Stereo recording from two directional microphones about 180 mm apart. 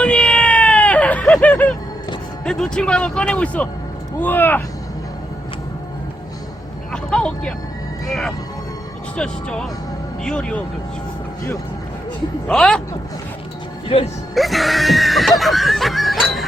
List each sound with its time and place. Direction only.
0.0 s a sound: 5° left (ahead or behind)
2.4 s speech: 5° left (ahead or behind)
6.9 s a sound: 5° left (ahead or behind)
8.0 s speech: centre (ahead or behind)
12.5 s speech: 5° left (ahead or behind)
13.8 s speech: 35° left (ahead or behind)
14.3 s screaming: centre (ahead or behind)